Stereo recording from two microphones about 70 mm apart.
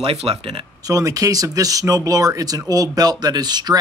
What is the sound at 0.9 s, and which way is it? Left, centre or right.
Speech, right.